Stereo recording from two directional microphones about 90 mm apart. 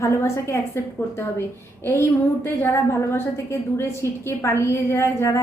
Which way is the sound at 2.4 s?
30° left (ahead or behind).